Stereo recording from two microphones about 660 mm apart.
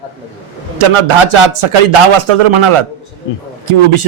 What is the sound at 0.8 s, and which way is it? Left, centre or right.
Speech, right.